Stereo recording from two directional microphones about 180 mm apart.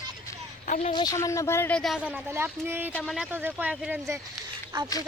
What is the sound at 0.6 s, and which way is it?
Speech, 40° left (ahead or behind).